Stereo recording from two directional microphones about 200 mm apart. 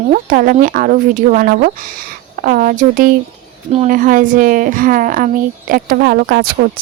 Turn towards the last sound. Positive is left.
turn(degrees=-50)  # may be behind; listen again after turning